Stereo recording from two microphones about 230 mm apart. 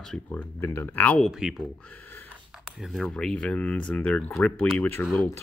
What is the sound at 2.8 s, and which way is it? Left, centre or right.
Speech, centre.